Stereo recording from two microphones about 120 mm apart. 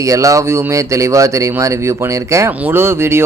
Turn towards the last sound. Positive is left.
turn(degrees=-20)  # may be behind; listen again after turning